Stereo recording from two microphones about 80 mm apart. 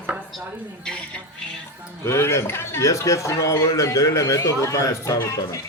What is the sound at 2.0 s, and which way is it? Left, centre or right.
A man's voice, left.